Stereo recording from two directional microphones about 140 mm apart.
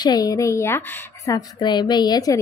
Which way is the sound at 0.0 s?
25° left (ahead or behind).